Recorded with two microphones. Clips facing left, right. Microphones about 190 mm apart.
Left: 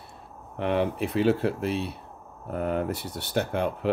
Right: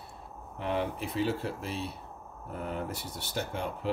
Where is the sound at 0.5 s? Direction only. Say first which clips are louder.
Left 6 dB; 65° left (ahead or behind).